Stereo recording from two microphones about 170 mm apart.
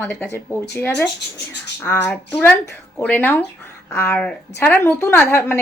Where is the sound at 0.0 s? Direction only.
10° left (ahead or behind).